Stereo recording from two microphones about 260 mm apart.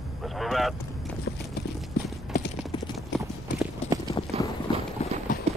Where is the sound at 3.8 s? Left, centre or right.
Left.